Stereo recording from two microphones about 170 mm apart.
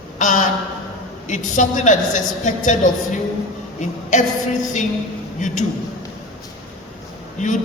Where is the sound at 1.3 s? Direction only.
45° left (ahead or behind).